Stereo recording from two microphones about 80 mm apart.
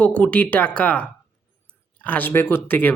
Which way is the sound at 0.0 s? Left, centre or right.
Centre.